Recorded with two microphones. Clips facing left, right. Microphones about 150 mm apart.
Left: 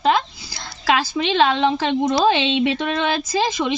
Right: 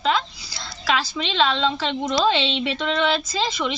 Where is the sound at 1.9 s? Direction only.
15° left (ahead or behind).